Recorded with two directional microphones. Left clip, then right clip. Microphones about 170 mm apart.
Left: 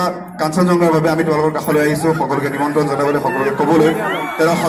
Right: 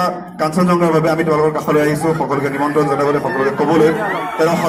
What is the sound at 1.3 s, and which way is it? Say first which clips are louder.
Speech: right 1 dB; 20° right (ahead or behind).